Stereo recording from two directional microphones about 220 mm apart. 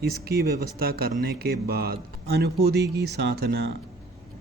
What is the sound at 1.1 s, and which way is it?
Speech, 45° right (ahead or behind).